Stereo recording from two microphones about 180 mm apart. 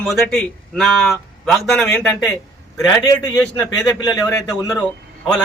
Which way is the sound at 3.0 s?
20° left (ahead or behind).